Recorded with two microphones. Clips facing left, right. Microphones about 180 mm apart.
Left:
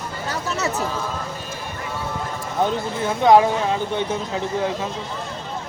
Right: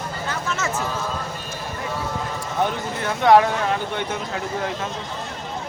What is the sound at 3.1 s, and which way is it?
Speech, 20° left (ahead or behind).